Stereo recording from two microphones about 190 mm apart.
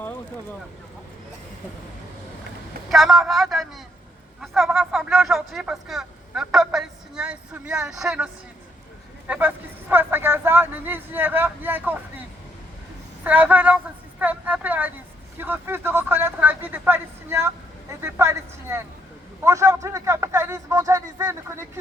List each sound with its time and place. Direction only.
2.9 s speech: centre (ahead or behind)
13.2 s speech: 5° right (ahead or behind)